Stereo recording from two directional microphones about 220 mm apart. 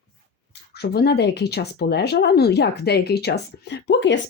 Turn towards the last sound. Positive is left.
turn(degrees=50)  # may be behind; listen again after turning